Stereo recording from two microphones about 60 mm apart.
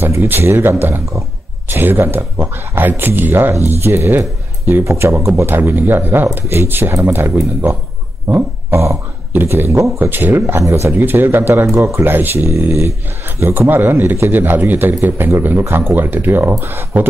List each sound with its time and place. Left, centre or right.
0.3 s a man's voice: right